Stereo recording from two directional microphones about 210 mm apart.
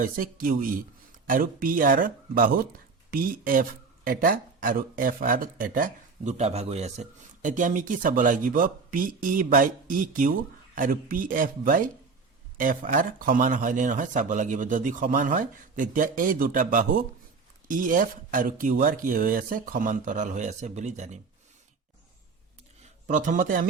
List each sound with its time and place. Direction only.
0.0 s speech: 40° right (ahead or behind)
22.8 s a man's voice: 35° right (ahead or behind)